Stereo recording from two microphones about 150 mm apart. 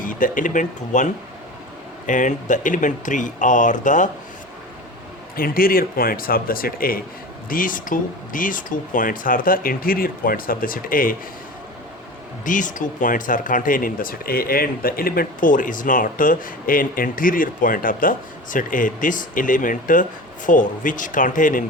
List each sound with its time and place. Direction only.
0.0 s speech: 65° left (ahead or behind)
5.4 s speech: 75° left (ahead or behind)
12.5 s speech: 60° left (ahead or behind)